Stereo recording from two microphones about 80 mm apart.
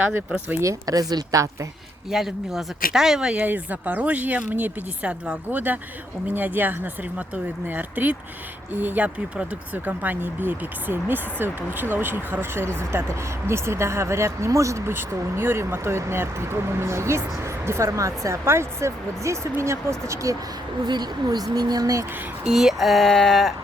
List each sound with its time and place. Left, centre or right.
0.6 s a woman's voice: right
2.0 s speech: centre
3.4 s speech: right
20.8 s speech: right
22.4 s speech: centre